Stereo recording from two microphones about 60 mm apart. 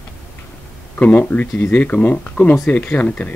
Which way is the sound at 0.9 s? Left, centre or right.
Left.